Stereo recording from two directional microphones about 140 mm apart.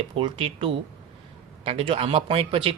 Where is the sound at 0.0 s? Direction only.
40° right (ahead or behind).